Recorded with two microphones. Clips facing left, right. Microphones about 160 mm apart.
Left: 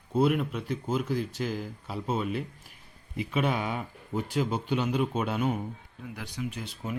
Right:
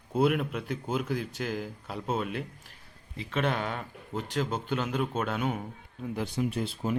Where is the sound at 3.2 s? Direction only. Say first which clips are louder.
Left 1 dB; 10° left (ahead or behind).